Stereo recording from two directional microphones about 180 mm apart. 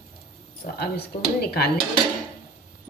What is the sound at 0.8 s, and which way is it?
Speech, 60° left (ahead or behind).